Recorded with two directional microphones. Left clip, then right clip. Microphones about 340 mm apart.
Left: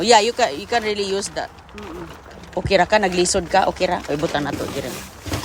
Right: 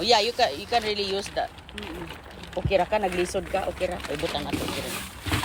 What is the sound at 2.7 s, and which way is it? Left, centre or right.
Speech, left.